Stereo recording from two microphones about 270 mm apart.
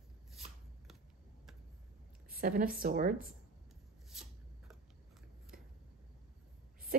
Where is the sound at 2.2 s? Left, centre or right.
Right.